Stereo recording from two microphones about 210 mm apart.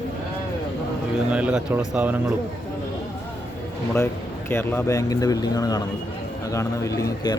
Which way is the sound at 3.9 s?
10° left (ahead or behind).